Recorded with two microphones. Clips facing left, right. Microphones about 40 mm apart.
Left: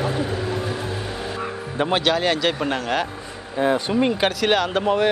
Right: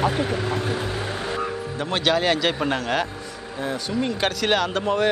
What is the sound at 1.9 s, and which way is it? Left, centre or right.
Speech, centre.